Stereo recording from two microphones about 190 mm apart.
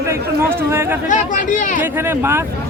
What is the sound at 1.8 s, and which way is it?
Speech, 10° right (ahead or behind).